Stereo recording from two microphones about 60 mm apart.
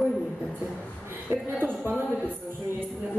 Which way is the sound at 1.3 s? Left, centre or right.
Right.